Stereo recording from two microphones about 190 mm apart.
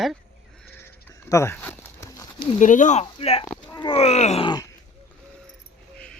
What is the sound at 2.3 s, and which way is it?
Speech, 40° left (ahead or behind).